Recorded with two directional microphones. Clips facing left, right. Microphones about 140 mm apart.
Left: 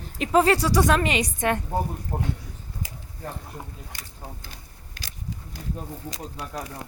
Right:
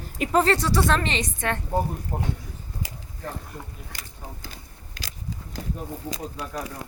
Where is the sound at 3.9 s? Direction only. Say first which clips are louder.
Right 2 dB; 90° right.